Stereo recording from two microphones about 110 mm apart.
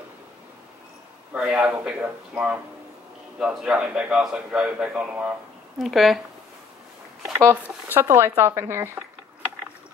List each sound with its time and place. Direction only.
1.3 s a man's voice: 5° right (ahead or behind)
5.8 s a man's voice: centre (ahead or behind)
7.3 s speech: 25° right (ahead or behind)